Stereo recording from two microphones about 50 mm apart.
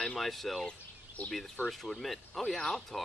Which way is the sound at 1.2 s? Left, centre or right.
Left.